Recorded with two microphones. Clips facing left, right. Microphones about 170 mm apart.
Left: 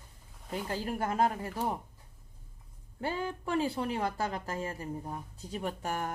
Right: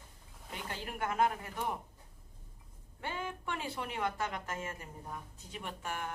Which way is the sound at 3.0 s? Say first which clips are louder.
Left 6 dB; 35° left (ahead or behind).